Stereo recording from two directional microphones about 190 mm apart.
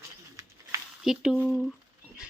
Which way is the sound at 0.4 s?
20° right (ahead or behind).